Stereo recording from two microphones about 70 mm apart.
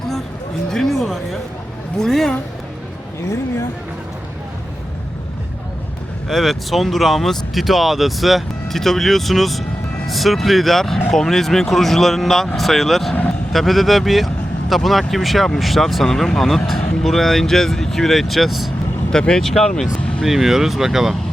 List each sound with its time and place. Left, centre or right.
0.7 s speech: centre
6.2 s speech: centre
19.1 s speech: centre
20.2 s speech: centre